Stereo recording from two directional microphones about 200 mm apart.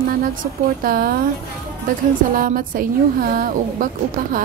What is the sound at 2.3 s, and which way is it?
A woman's voice, 45° right (ahead or behind).